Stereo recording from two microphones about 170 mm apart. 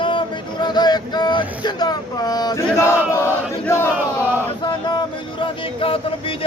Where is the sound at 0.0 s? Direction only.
30° left (ahead or behind).